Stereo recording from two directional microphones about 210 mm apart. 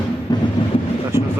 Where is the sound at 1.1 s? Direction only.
10° right (ahead or behind).